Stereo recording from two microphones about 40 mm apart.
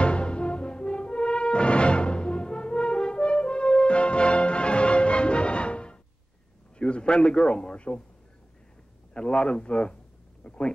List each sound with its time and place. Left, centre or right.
0.0 s french horn: left
6.8 s a man's voice: left
9.1 s a man's voice: left
10.4 s a sound: left